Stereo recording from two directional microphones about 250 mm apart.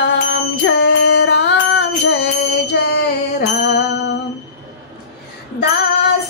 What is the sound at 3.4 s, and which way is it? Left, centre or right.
Music, left.